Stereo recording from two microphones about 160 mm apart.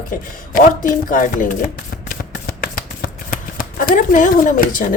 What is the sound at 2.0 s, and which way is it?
Shuffling cards, 65° left (ahead or behind).